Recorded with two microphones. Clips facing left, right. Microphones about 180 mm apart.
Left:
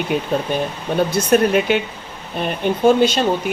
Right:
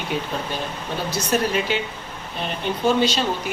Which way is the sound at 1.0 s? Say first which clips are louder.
Left 6 dB; 55° left (ahead or behind).